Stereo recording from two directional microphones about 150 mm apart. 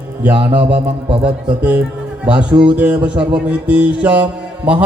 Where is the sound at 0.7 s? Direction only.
35° right (ahead or behind).